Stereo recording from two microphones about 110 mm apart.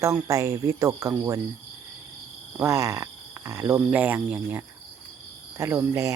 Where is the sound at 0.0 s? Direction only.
30° right (ahead or behind).